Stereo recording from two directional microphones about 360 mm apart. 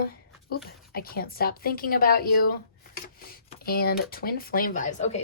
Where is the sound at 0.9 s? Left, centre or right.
Left.